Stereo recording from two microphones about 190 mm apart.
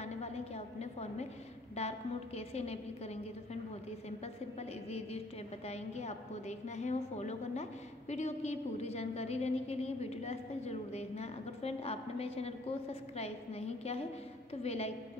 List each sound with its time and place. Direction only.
0.0 s a sound: 35° left (ahead or behind)
1.8 s a woman's voice: 35° left (ahead or behind)
4.6 s a woman's voice: 35° left (ahead or behind)